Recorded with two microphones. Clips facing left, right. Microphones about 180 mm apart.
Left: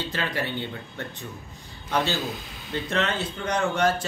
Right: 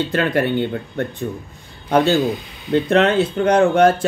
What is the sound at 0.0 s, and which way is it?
Speech, 55° right (ahead or behind).